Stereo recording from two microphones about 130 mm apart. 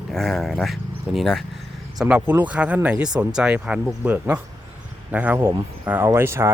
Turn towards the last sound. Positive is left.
turn(degrees=-20)  # may be behind; listen again after turning